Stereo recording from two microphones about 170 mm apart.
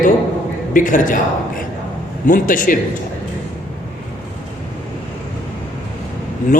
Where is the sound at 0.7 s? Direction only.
50° left (ahead or behind).